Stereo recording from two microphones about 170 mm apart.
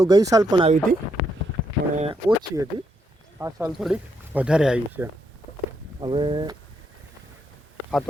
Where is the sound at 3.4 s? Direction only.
15° right (ahead or behind).